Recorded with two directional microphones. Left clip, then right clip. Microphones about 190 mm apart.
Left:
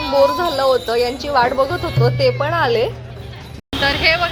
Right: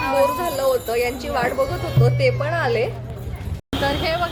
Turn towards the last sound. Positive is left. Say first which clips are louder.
# left 6 dB
turn(degrees=5)  # may be behind; listen again after turning